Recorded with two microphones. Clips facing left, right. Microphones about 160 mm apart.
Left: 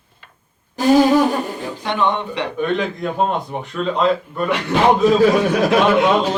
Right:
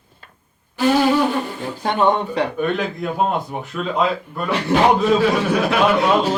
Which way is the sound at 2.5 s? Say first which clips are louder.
Left 1 dB; 5° right (ahead or behind).